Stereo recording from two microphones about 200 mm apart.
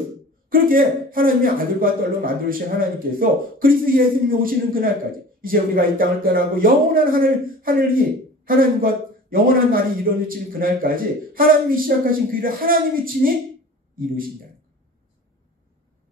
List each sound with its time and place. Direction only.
0.5 s a man's voice: 45° right (ahead or behind)